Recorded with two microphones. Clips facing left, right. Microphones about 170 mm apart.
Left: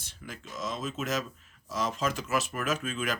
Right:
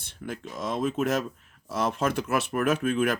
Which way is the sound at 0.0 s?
55° right (ahead or behind).